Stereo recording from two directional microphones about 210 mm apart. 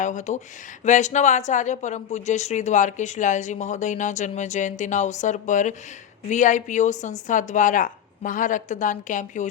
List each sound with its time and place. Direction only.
0.0 s speech: 35° left (ahead or behind)